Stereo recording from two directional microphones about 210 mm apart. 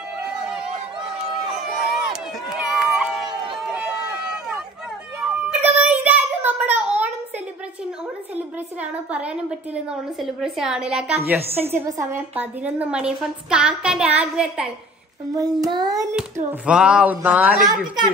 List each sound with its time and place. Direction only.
0.2 s a sound: 5° right (ahead or behind)
1.1 s run: centre (ahead or behind)
5.2 s child singing: 5° right (ahead or behind)
9.1 s a woman's voice: 5° right (ahead or behind)
15.3 s a woman's voice: 15° right (ahead or behind)
16.6 s a woman's voice: 5° right (ahead or behind)